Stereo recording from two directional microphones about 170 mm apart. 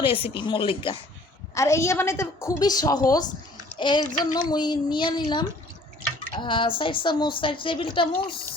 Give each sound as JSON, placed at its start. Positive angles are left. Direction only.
{"t": 0.0, "sound": "speech", "side_deg": 30}
{"t": 1.5, "sound": "a woman's voice", "side_deg": 15}